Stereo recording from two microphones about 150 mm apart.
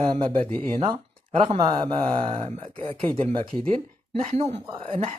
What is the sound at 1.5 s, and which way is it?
Speech, 40° right (ahead or behind).